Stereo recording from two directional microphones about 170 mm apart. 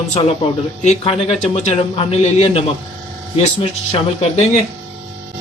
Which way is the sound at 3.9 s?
40° left (ahead or behind).